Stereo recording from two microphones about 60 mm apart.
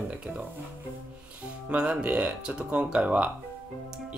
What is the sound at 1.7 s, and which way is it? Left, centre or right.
Speech, centre.